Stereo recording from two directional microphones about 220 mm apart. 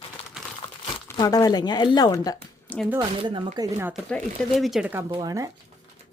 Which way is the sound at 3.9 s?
Centre (ahead or behind).